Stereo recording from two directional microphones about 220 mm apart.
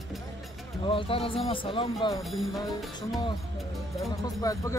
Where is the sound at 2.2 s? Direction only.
Centre (ahead or behind).